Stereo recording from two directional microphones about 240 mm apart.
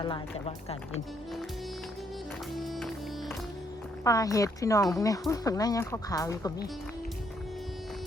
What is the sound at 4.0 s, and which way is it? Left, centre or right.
Speech, centre.